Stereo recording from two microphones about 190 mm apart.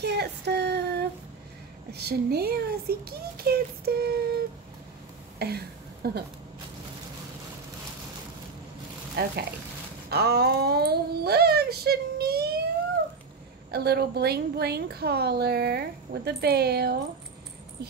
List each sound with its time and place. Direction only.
0.0 s child singing: 60° right (ahead or behind)
1.9 s a woman's voice: 60° right (ahead or behind)
6.0 s a woman's voice: 60° right (ahead or behind)
9.1 s speech: 60° right (ahead or behind)
13.7 s a woman's voice: 55° right (ahead or behind)